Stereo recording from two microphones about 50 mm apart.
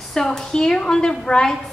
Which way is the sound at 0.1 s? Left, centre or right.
Centre.